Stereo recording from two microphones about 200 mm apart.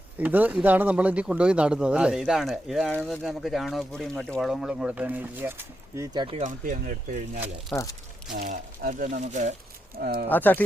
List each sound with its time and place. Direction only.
0.2 s speech: 10° right (ahead or behind)
6.1 s speech: 25° right (ahead or behind)
6.4 s speech: 40° right (ahead or behind)
7.7 s speech: 5° left (ahead or behind)
8.4 s speech: 40° right (ahead or behind)
10.0 s speech: 45° right (ahead or behind)
10.2 s speech: 10° left (ahead or behind)